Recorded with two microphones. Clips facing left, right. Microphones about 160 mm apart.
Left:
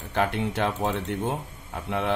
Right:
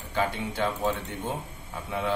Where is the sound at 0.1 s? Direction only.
70° left (ahead or behind).